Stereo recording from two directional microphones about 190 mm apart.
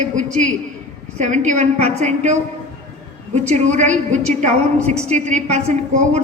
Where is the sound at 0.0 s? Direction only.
40° right (ahead or behind).